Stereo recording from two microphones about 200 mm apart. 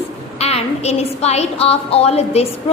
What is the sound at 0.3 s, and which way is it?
A woman's voice, 30° left (ahead or behind).